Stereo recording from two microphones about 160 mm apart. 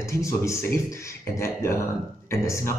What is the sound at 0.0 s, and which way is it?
Speech, 20° left (ahead or behind).